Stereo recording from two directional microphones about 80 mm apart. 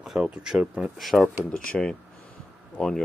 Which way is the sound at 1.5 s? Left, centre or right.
Centre.